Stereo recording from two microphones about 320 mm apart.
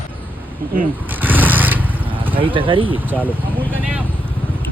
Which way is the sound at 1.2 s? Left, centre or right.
Centre.